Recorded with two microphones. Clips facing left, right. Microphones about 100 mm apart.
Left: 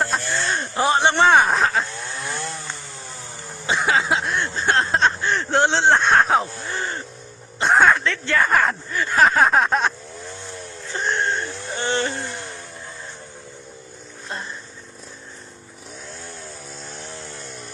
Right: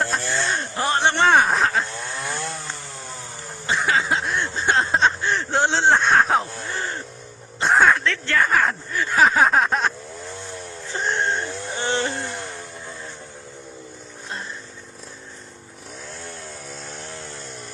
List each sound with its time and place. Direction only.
0.0 s a sound: centre (ahead or behind)
3.7 s speech: 5° left (ahead or behind)
10.9 s music: 15° right (ahead or behind)
12.0 s speech: 5° right (ahead or behind)